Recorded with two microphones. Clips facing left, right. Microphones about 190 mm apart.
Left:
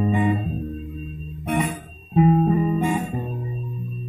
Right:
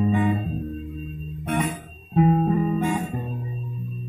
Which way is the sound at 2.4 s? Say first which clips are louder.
Left 2 dB; 15° left (ahead or behind).